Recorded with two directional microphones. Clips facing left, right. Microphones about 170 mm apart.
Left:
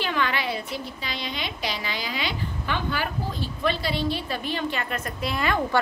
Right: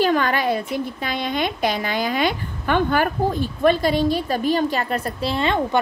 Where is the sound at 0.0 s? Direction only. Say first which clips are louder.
Right 8 dB; 45° right (ahead or behind).